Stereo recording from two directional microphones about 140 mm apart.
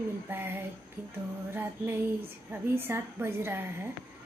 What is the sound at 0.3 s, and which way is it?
A woman's voice, 15° right (ahead or behind).